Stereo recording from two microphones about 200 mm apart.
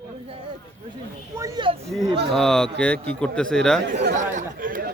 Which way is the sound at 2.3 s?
Centre (ahead or behind).